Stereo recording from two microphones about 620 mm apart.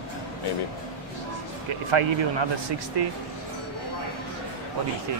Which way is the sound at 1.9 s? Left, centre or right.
Right.